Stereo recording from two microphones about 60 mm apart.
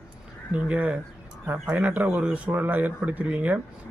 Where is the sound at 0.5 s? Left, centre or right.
Right.